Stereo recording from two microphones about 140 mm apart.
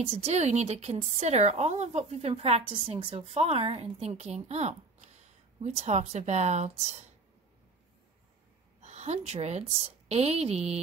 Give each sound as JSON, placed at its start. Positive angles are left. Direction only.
{"t": 0.0, "sound": "a woman's voice", "side_deg": -50}
{"t": 8.8, "sound": "a woman's voice", "side_deg": -55}